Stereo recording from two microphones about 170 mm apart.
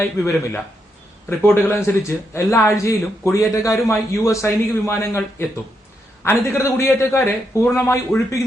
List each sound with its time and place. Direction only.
0.0 s a man's voice: 15° left (ahead or behind)